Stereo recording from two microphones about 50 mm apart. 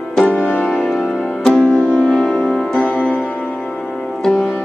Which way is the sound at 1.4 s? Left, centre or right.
Centre.